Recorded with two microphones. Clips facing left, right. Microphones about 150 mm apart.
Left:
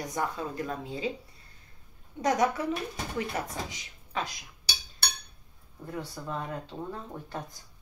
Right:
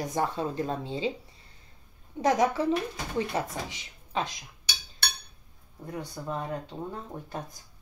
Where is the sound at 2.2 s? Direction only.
25° right (ahead or behind).